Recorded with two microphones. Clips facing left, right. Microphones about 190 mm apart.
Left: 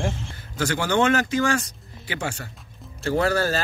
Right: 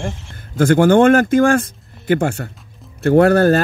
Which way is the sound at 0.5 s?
50° right (ahead or behind).